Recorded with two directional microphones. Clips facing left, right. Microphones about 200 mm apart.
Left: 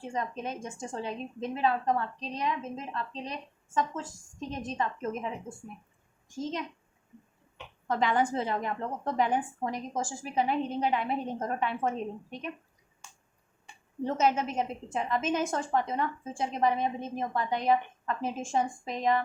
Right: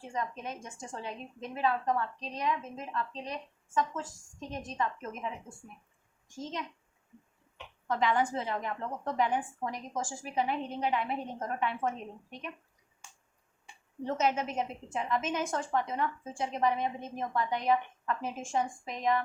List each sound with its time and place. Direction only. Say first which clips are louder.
0.1 s a woman's voice: left 2 dB; 25° left (ahead or behind)
7.9 s a woman's voice: left 2 dB; 35° left (ahead or behind)
14.0 s a woman's voice: left 3 dB; 35° left (ahead or behind)